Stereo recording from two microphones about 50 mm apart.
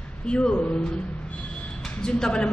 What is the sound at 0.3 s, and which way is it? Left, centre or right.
Speech, centre.